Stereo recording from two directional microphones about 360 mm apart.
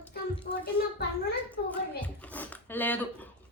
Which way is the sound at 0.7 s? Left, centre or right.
Left.